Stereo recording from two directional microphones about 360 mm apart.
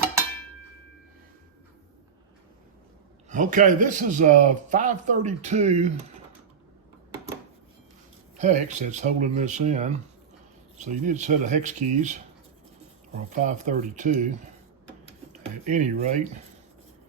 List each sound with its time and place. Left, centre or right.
3.2 s a man's voice: right
8.4 s a man's voice: centre
13.3 s a man's voice: right